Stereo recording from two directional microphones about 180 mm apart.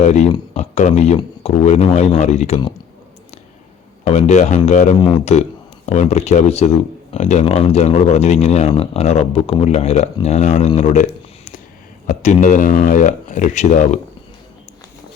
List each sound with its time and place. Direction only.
0.0 s speech: 40° left (ahead or behind)
4.0 s speech: 40° left (ahead or behind)
4.9 s speech: 25° left (ahead or behind)
5.2 s speech: 35° left (ahead or behind)
12.0 s speech: 40° left (ahead or behind)